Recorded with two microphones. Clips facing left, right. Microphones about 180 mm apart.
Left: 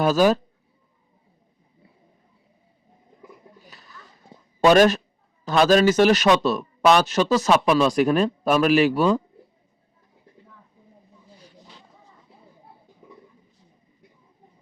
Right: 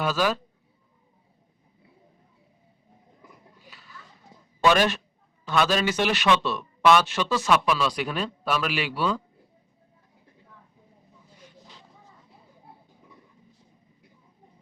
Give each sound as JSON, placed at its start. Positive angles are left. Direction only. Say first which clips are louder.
{"t": 0.0, "sound": "speech", "louder": "left 7 dB", "side_deg": 45}
{"t": 3.6, "sound": "a sound", "louder": "left 2 dB", "side_deg": 45}
{"t": 4.6, "sound": "speech", "louder": "left 6 dB", "side_deg": 40}